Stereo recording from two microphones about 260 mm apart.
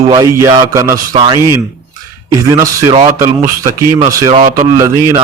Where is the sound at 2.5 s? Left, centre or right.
Centre.